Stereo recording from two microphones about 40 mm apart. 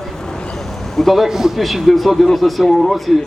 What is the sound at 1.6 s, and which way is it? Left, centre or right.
A man's voice, centre.